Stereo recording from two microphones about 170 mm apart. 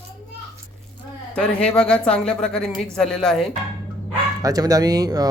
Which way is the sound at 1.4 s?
5° left (ahead or behind).